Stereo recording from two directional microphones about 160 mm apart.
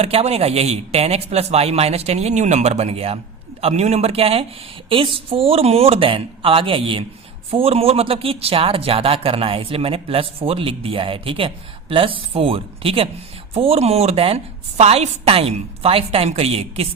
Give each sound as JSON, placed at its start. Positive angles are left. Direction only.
{"t": 0.0, "sound": "speech", "side_deg": -40}